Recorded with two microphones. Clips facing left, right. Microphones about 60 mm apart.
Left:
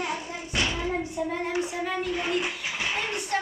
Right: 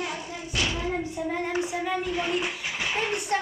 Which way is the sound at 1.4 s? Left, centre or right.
Centre.